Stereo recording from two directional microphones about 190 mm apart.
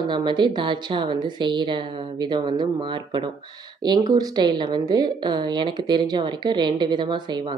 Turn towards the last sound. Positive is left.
turn(degrees=-25)  # may be behind; listen again after turning